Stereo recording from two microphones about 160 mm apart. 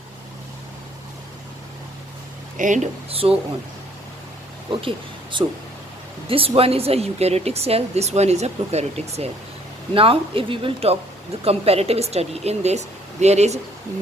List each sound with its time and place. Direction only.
2.6 s speech: 50° right (ahead or behind)
4.7 s speech: 30° right (ahead or behind)